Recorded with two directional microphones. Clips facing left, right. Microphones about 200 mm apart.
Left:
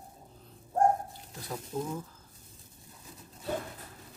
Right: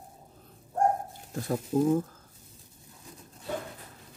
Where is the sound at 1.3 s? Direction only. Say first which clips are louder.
Right 12 dB; 50° right (ahead or behind).